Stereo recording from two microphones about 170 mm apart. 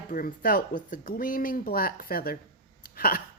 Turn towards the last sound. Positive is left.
turn(degrees=60)  # may be behind; listen again after turning